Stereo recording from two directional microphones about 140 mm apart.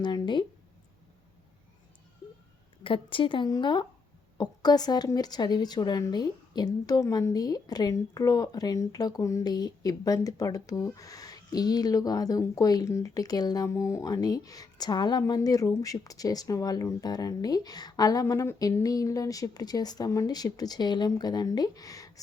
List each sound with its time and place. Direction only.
0.0 s speech: 30° left (ahead or behind)
2.8 s speech: 40° left (ahead or behind)